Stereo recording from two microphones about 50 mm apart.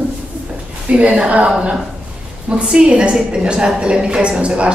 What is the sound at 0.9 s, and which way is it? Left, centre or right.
A woman's voice, right.